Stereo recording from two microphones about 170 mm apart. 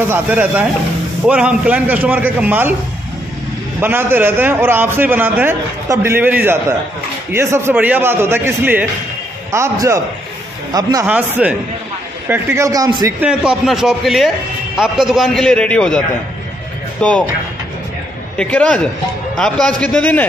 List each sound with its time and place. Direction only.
0.1 s a man's voice: 10° right (ahead or behind)
3.8 s a man's voice: 10° right (ahead or behind)
11.1 s a man's voice: 10° right (ahead or behind)
13.2 s a man's voice: 5° right (ahead or behind)
17.0 s a man's voice: 5° left (ahead or behind)
18.4 s a man's voice: 5° left (ahead or behind)